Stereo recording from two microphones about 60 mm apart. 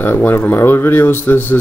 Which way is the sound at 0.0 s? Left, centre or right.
Left.